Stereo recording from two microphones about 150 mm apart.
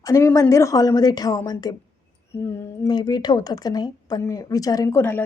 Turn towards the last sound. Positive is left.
turn(degrees=15)  # may be behind; listen again after turning